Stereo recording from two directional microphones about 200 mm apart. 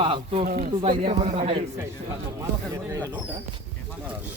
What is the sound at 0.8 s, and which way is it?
Speech, 30° right (ahead or behind).